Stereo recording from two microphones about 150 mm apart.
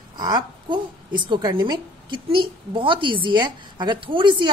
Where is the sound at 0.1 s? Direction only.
30° right (ahead or behind).